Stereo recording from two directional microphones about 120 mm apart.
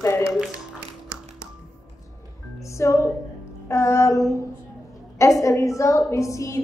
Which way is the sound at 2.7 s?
25° left (ahead or behind).